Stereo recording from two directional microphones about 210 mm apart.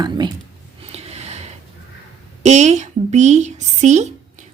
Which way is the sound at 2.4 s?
35° right (ahead or behind).